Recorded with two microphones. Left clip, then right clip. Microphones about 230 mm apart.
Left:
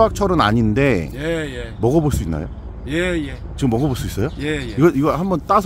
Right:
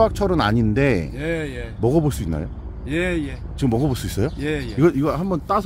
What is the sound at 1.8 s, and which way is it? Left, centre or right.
Speech, centre.